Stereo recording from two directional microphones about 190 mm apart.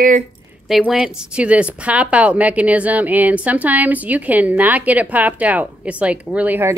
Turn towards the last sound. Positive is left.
turn(degrees=-10)  # may be behind; listen again after turning